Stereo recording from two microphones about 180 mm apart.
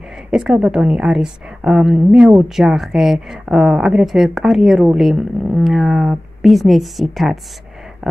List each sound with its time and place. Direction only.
0.3 s a woman's voice: 5° right (ahead or behind)